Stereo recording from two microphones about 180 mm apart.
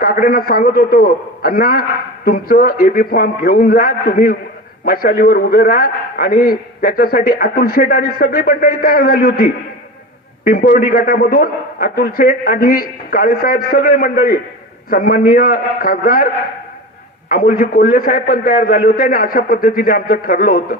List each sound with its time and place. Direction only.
0.0 s a man's voice: 55° left (ahead or behind)
17.3 s a man's voice: 55° left (ahead or behind)